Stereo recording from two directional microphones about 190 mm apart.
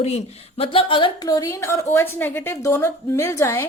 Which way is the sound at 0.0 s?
30° left (ahead or behind).